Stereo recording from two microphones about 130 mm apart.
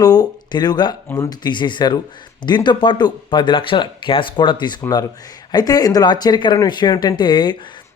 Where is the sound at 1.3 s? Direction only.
35° left (ahead or behind).